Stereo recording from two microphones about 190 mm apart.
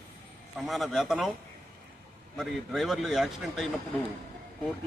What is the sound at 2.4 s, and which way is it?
A man's voice, centre (ahead or behind).